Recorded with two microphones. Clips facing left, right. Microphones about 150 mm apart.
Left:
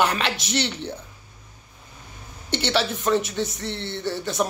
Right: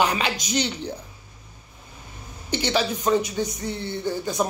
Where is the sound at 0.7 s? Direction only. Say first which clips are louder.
Right 1 dB; 5° right (ahead or behind).